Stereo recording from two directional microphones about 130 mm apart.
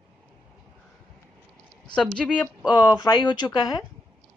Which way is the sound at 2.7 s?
30° left (ahead or behind).